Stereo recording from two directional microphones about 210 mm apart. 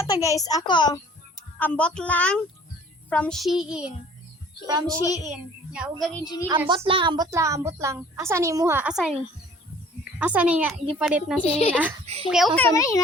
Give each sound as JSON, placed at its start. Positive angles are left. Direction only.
{"t": 0.0, "sound": "a child's voice", "side_deg": 15}
{"t": 4.6, "sound": "a woman's voice", "side_deg": -15}
{"t": 4.9, "sound": "a child's voice", "side_deg": 15}
{"t": 5.2, "sound": "a child's voice", "side_deg": -5}
{"t": 6.2, "sound": "a woman's voice", "side_deg": 20}
{"t": 6.7, "sound": "a woman's voice", "side_deg": -25}
{"t": 10.2, "sound": "a woman's voice", "side_deg": -5}
{"t": 11.4, "sound": "a woman's voice", "side_deg": 30}
{"t": 12.1, "sound": "a child's voice", "side_deg": -30}
{"t": 12.5, "sound": "a child's voice", "side_deg": 10}